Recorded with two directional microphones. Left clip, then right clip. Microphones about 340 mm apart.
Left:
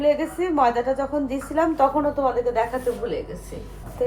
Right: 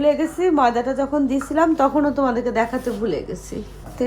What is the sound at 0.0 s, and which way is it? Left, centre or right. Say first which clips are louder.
A woman's voice: right 3 dB; right.